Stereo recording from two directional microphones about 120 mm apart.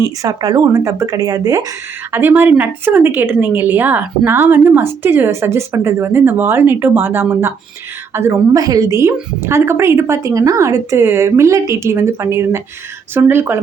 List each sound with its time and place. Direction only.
0.0 s a woman's voice: 30° right (ahead or behind)
2.1 s a woman's voice: 15° right (ahead or behind)